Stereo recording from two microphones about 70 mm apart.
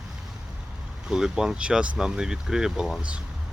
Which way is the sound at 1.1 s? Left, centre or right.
Centre.